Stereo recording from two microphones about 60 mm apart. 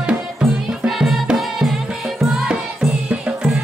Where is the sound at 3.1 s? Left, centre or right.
Centre.